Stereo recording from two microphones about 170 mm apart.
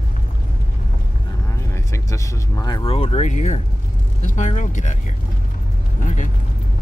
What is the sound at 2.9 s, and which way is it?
Speech, 40° left (ahead or behind).